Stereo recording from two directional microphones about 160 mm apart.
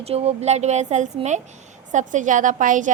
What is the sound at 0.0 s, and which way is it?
A child's voice, 40° right (ahead or behind).